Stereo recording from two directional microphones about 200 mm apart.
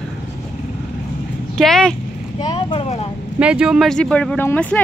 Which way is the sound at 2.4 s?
25° left (ahead or behind).